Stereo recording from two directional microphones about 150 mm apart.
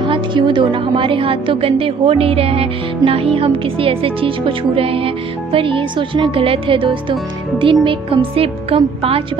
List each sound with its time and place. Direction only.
0.0 s a woman's voice: 30° right (ahead or behind)